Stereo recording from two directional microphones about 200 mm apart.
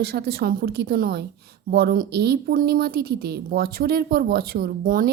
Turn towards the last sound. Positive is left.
turn(degrees=-45)  # may be behind; listen again after turning